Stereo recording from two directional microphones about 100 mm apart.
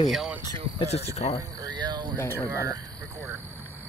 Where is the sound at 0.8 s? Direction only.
90° left.